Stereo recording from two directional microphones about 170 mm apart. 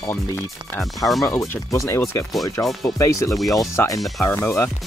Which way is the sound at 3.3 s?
Centre (ahead or behind).